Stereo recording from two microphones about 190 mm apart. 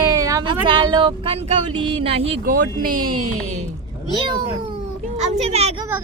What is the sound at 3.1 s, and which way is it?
Speech, 35° right (ahead or behind).